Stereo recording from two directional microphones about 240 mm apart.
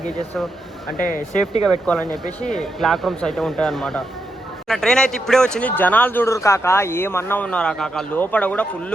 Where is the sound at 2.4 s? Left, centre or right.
Centre.